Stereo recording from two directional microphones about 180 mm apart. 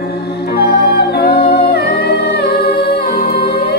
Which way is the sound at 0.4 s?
60° left (ahead or behind).